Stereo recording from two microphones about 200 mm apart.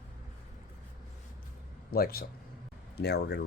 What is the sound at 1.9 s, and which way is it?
Speech, 50° left (ahead or behind).